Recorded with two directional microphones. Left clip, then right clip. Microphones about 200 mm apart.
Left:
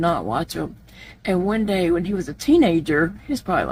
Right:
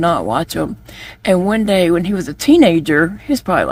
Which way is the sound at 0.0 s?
35° right (ahead or behind).